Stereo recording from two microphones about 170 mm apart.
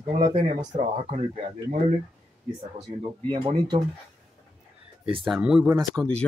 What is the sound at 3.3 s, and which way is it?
Speech, 30° right (ahead or behind).